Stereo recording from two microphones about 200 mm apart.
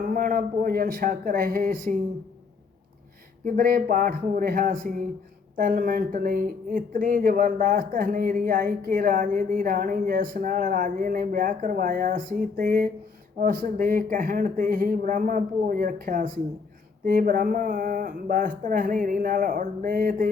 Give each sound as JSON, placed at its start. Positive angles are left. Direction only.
{"t": 0.0, "sound": "speech", "side_deg": -45}
{"t": 3.4, "sound": "speech", "side_deg": -45}